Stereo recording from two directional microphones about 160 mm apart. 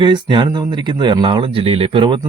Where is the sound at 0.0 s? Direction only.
30° right (ahead or behind).